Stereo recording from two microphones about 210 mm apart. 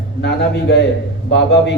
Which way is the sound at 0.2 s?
55° left (ahead or behind).